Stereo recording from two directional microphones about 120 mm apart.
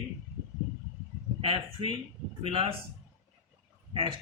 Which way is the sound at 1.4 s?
45° right (ahead or behind).